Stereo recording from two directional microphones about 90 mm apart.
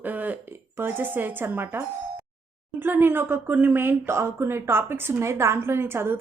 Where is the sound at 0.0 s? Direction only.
20° right (ahead or behind).